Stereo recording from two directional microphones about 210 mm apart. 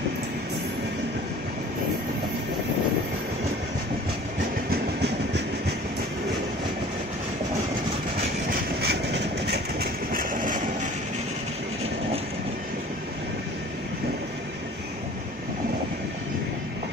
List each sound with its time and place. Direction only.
8.8 s vehicle: 55° right (ahead or behind)